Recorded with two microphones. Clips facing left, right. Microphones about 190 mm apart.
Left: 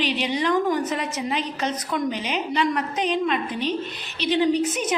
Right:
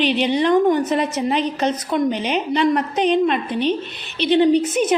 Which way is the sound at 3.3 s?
65° right (ahead or behind).